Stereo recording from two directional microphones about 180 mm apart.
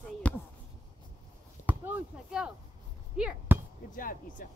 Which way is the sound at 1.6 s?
10° right (ahead or behind).